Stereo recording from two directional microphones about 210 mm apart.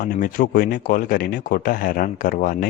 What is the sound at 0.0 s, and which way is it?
Speech, 40° left (ahead or behind).